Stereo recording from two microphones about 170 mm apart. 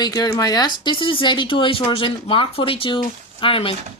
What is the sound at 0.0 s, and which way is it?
Speech, 20° left (ahead or behind).